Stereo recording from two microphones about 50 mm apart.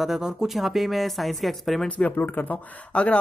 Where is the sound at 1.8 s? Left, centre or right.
Left.